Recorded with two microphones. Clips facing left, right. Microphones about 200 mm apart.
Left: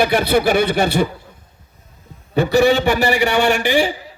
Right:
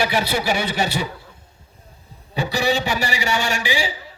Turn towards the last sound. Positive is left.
turn(degrees=60)  # may be behind; listen again after turning